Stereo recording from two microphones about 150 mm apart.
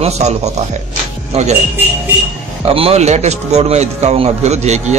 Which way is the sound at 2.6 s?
40° right (ahead or behind).